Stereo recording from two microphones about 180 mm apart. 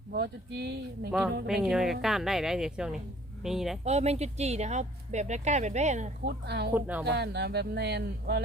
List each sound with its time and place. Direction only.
0.1 s speech: 65° right (ahead or behind)
1.5 s a woman's voice: centre (ahead or behind)
3.8 s speech: 35° right (ahead or behind)
6.2 s speech: 65° right (ahead or behind)
6.7 s speech: 10° right (ahead or behind)
7.0 s speech: 65° right (ahead or behind)